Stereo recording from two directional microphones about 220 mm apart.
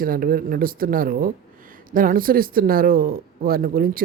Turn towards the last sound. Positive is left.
turn(degrees=-40)  # may be behind; listen again after turning